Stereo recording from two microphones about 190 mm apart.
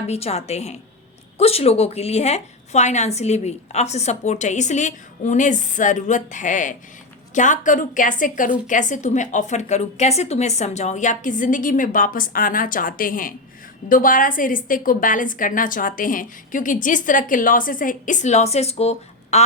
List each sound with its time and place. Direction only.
0.1 s a woman's voice: 35° left (ahead or behind)